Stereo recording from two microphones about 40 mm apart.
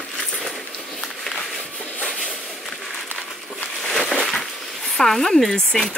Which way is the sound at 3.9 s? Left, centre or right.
Centre.